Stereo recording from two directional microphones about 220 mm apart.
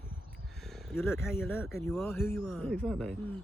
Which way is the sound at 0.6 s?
Centre (ahead or behind).